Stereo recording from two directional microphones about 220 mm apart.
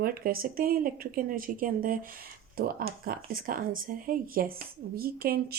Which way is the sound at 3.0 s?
40° right (ahead or behind).